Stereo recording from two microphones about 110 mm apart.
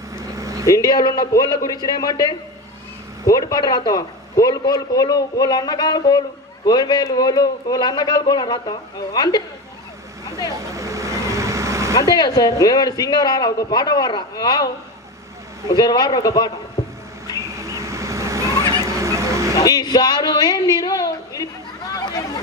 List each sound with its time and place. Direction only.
0.2 s vehicle: 30° right (ahead or behind)
0.7 s a man's voice: 35° left (ahead or behind)
10.7 s vehicle: 30° right (ahead or behind)
11.9 s a man's voice: 35° left (ahead or behind)
17.3 s vehicle: 30° right (ahead or behind)
19.5 s a woman's voice: 35° left (ahead or behind)
21.9 s chatter: 35° left (ahead or behind)